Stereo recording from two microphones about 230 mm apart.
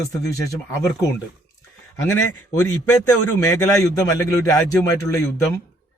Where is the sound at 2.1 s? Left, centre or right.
Left.